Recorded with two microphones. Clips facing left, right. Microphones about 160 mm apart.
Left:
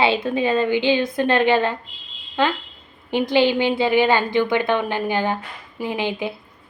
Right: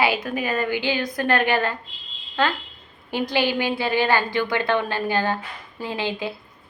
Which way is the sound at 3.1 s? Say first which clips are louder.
Left 5 dB; 20° left (ahead or behind).